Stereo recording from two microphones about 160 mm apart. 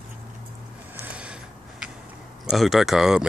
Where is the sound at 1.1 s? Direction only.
5° right (ahead or behind).